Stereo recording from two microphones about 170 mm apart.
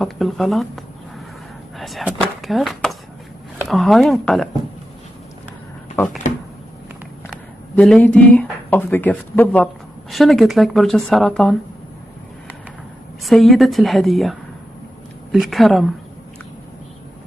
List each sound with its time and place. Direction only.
0.0 s speech: centre (ahead or behind)
1.8 s a woman's voice: centre (ahead or behind)
6.0 s speech: 45° left (ahead or behind)
7.7 s a woman's voice: 5° left (ahead or behind)
13.2 s a woman's voice: centre (ahead or behind)
15.3 s a woman's voice: centre (ahead or behind)